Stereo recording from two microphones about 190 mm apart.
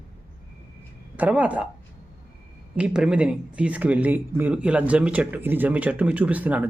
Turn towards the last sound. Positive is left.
turn(degrees=-10)  # may be behind; listen again after turning